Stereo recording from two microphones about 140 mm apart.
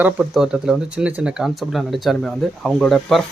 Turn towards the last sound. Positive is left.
turn(degrees=5)  # may be behind; listen again after turning